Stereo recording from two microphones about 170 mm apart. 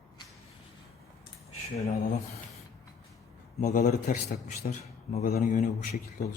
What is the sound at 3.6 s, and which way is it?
Speech, 50° left (ahead or behind).